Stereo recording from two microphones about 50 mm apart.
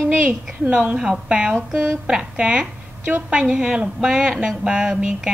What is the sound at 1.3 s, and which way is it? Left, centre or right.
A woman's voice, right.